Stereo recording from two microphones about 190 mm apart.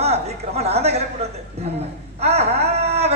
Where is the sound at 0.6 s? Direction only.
35° right (ahead or behind).